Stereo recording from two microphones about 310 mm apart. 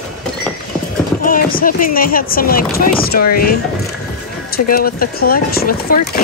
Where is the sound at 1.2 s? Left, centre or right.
Left.